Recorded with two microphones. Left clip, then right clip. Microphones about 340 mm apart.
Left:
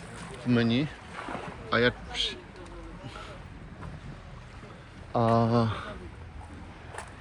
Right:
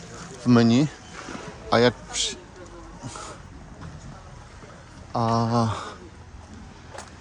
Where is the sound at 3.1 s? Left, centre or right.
Centre.